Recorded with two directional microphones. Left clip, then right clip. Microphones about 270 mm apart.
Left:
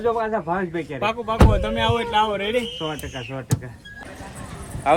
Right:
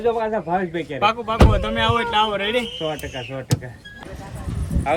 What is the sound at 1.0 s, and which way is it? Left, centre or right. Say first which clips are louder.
A man's voice: right 3 dB; centre.